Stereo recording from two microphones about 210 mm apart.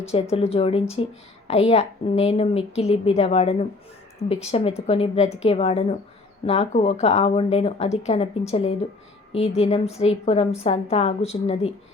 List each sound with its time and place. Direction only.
0.0 s speech: 30° left (ahead or behind)